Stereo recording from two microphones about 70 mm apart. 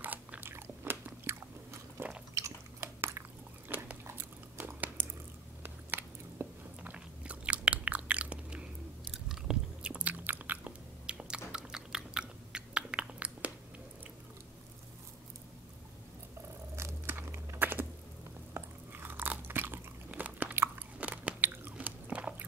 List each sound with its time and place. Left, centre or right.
0.0 s biting: right
2.3 s chewing: right
3.6 s biting: right
16.7 s biting: right
20.1 s chewing: right
21.0 s biting: right